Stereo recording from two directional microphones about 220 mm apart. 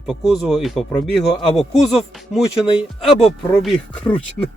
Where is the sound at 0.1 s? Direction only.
Centre (ahead or behind).